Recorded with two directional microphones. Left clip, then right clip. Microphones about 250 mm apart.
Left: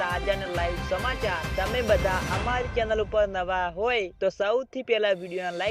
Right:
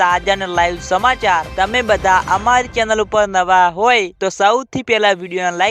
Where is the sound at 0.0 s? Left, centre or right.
Right.